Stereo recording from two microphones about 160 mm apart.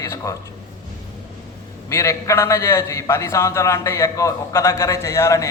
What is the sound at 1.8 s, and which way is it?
A man's voice, 20° left (ahead or behind).